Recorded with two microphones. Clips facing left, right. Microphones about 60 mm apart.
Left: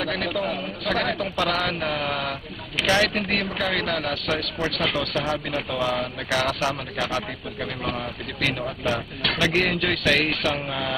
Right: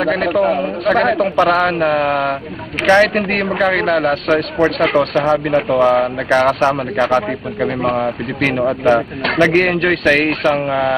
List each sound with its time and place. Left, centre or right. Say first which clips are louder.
0.0 s a man's voice: right 11 dB; right
8.8 s speech: right 10 dB; right